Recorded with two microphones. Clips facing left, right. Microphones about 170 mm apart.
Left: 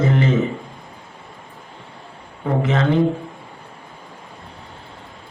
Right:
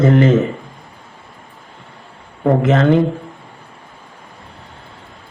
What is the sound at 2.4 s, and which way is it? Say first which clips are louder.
Speech: right 6 dB; 55° right (ahead or behind).